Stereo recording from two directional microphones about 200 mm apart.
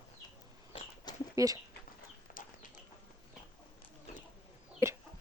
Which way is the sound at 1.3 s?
15° right (ahead or behind).